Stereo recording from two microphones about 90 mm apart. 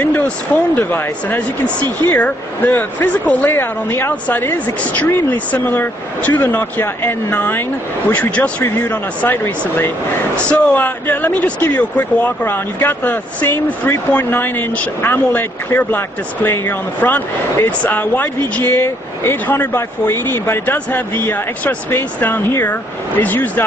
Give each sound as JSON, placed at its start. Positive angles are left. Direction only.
{"t": 0.7, "sound": "speech", "side_deg": 20}
{"t": 10.3, "sound": "speech", "side_deg": 15}